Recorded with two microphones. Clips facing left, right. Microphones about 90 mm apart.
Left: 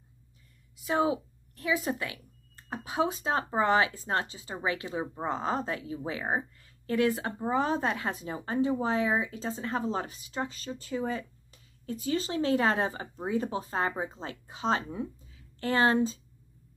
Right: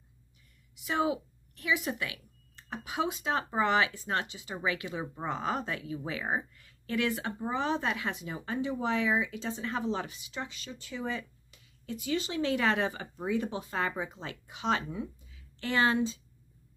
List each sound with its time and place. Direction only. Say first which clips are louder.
0.8 s a woman's voice: left 3 dB; 35° left (ahead or behind)